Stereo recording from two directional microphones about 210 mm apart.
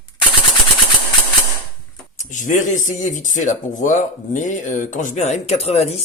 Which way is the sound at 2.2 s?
35° left (ahead or behind).